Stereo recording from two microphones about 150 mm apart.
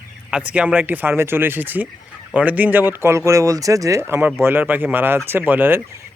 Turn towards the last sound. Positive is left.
turn(degrees=-10)  # may be behind; listen again after turning